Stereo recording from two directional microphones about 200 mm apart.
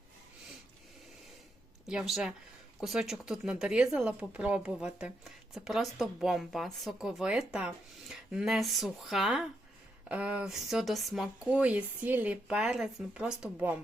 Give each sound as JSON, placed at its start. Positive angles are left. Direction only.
{"t": 1.9, "sound": "speech", "side_deg": -5}